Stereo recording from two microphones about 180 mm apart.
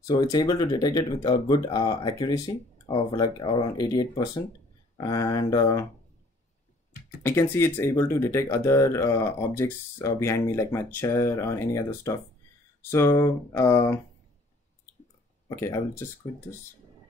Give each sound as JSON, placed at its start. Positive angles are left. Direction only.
{"t": 0.0, "sound": "speech", "side_deg": 20}
{"t": 7.2, "sound": "speech", "side_deg": 15}
{"t": 15.4, "sound": "speech", "side_deg": 20}